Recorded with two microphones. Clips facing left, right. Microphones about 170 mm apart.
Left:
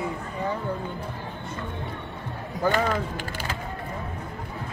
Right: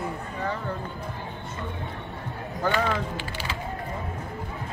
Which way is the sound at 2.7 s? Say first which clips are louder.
Left 1 dB; 45° left (ahead or behind).